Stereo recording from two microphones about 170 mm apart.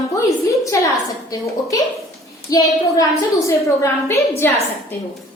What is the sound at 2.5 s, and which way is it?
A woman's voice, 20° left (ahead or behind).